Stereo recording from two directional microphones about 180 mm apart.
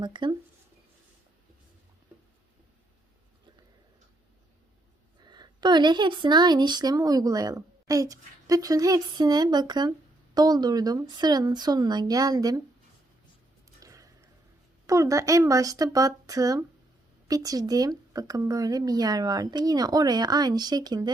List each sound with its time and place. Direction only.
0.0 s speech: 25° right (ahead or behind)
5.2 s speech: 25° right (ahead or behind)
13.7 s a sound: 20° right (ahead or behind)
14.8 s speech: 20° right (ahead or behind)